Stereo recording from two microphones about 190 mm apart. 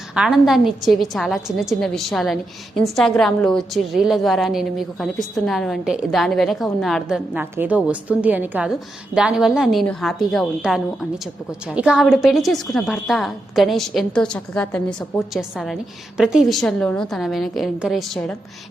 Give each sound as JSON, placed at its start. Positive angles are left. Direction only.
{"t": 0.1, "sound": "a woman's voice", "side_deg": -5}